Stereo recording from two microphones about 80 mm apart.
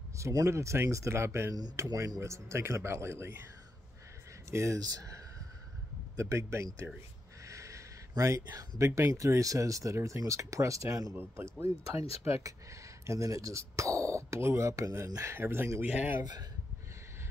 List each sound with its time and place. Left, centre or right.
0.2 s speech: right
4.5 s speech: right
7.4 s a sound: right
8.1 s speech: right
11.1 s speech: right